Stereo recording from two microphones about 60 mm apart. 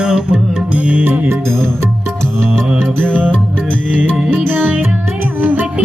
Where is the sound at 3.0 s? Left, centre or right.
Right.